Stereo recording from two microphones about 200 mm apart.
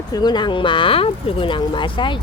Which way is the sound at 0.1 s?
20° left (ahead or behind).